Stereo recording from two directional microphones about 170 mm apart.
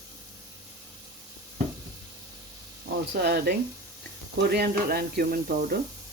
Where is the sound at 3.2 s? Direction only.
75° right (ahead or behind).